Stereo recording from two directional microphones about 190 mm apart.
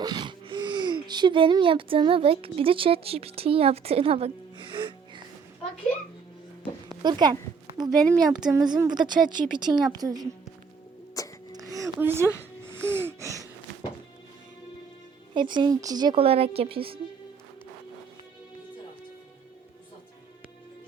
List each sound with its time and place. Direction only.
0.0 s speech: 25° right (ahead or behind)
6.8 s a sound: 20° right (ahead or behind)
7.8 s a woman's voice: 20° right (ahead or behind)
11.2 s music: 20° left (ahead or behind)
11.5 s a sound: 20° right (ahead or behind)
11.9 s speech: 10° right (ahead or behind)
12.8 s gasp: 10° right (ahead or behind)
15.4 s a woman's voice: 25° right (ahead or behind)